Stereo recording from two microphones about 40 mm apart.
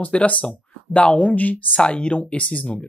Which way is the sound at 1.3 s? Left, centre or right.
Left.